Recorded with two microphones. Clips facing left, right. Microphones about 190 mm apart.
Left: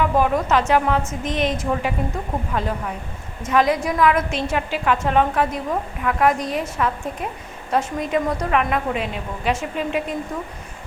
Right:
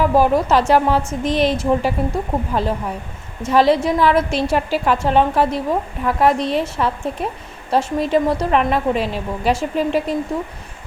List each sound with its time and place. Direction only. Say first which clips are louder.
0.0 s a woman's voice: right 4 dB; 35° right (ahead or behind)